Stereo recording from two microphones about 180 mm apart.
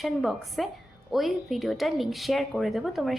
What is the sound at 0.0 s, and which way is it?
A woman's voice, centre (ahead or behind).